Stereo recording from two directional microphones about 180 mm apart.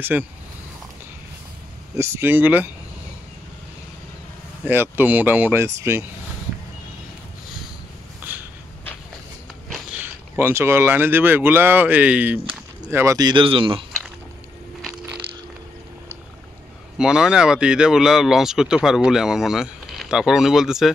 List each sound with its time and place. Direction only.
0.1 s speech: 5° right (ahead or behind)
2.0 s speech: 10° right (ahead or behind)
4.6 s speech: 10° right (ahead or behind)
8.3 s snort: 10° right (ahead or behind)
9.7 s speech: 10° right (ahead or behind); by 13.8 s 30° right (ahead or behind)
17.0 s speech: 5° right (ahead or behind)